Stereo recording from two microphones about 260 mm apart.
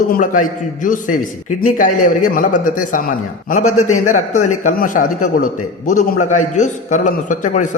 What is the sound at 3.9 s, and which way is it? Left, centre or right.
Speech, left.